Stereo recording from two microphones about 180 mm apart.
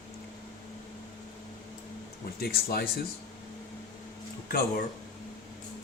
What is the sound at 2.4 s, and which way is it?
Speech, 60° left (ahead or behind).